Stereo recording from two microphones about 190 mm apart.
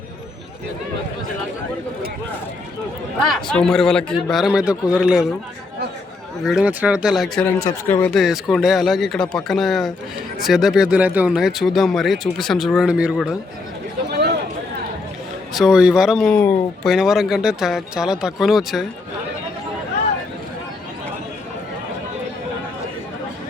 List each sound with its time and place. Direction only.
3.2 s speech: 5° left (ahead or behind)
6.4 s speech: centre (ahead or behind)
7.4 s speech: 15° left (ahead or behind)
8.1 s speech: centre (ahead or behind)
14.1 s a sound: 60° right (ahead or behind)
15.5 s speech: 5° right (ahead or behind)